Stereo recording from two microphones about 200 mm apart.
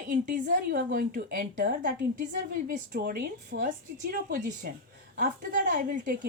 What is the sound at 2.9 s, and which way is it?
A woman's voice, 50° right (ahead or behind).